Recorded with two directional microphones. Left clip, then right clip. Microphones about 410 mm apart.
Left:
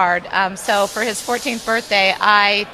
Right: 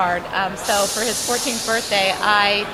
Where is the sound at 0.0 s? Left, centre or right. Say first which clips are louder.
Left 4 dB; left.